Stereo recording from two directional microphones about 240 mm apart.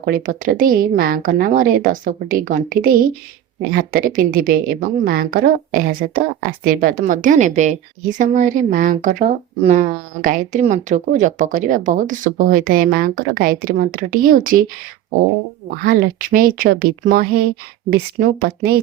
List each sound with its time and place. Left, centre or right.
0.0 s speech: right
15.7 s speech: right